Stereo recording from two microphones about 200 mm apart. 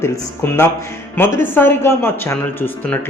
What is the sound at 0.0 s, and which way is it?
Speech, 10° left (ahead or behind).